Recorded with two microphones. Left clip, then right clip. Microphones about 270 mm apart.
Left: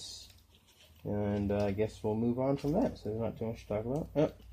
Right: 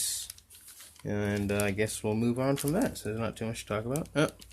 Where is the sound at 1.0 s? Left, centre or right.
Right.